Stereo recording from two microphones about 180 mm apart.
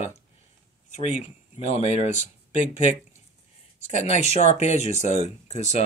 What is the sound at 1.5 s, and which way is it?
Speech, 35° left (ahead or behind).